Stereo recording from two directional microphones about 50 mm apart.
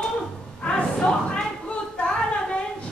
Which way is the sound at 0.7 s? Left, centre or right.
Left.